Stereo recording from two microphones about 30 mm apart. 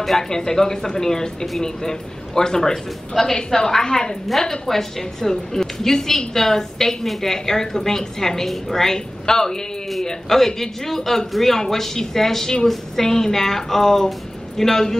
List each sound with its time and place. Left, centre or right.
0.3 s a woman's voice: centre